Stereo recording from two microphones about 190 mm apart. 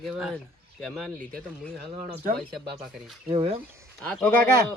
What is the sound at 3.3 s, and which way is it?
Speech, 30° right (ahead or behind).